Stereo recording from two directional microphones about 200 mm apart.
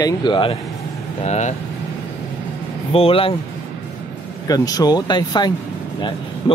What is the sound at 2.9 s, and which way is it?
Speech, 30° left (ahead or behind).